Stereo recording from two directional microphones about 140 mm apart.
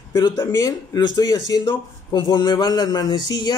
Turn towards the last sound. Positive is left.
turn(degrees=30)  # may be behind; listen again after turning